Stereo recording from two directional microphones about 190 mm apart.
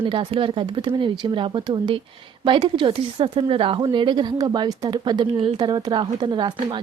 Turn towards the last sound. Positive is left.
turn(degrees=-25)  # may be behind; listen again after turning